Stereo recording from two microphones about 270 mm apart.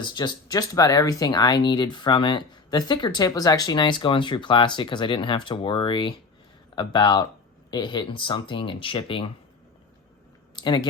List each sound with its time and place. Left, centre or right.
0.0 s speech: centre
10.5 s speech: centre